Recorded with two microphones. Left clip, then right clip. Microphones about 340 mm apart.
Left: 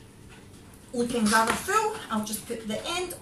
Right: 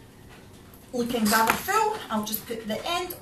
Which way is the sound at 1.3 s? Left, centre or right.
Centre.